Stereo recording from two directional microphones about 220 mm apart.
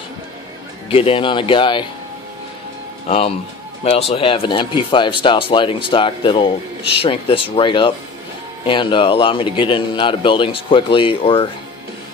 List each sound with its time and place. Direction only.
0.8 s speech: 25° left (ahead or behind)
3.1 s speech: 25° left (ahead or behind)